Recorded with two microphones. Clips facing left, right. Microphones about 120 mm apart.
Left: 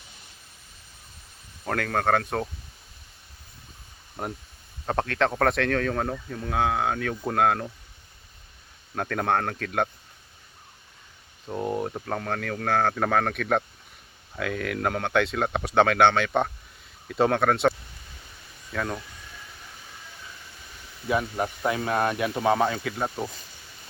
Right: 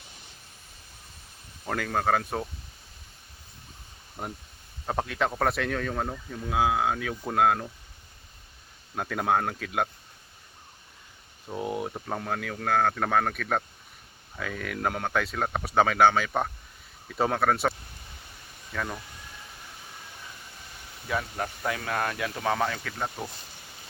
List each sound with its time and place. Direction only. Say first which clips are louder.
1.6 s speech: left 2 dB; 5° right (ahead or behind)
4.9 s speech: left 3 dB; 5° right (ahead or behind)
9.0 s speech: left 1 dB; 5° right (ahead or behind)
11.4 s speech: left 3 dB; centre (ahead or behind)
21.7 s speech: left 5 dB; 25° left (ahead or behind)